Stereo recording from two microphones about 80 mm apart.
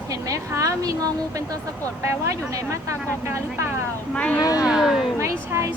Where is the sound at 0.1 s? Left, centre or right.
Right.